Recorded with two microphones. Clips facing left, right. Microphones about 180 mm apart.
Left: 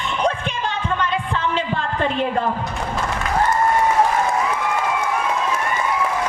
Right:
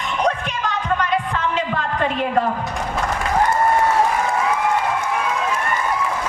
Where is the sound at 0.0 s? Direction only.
30° left (ahead or behind).